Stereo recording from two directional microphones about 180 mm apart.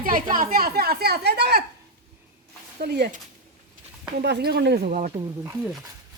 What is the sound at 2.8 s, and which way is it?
Speech, 65° right (ahead or behind).